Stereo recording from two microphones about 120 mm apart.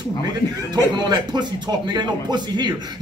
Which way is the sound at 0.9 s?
35° right (ahead or behind).